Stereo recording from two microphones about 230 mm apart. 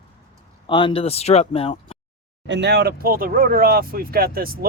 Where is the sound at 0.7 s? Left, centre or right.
Left.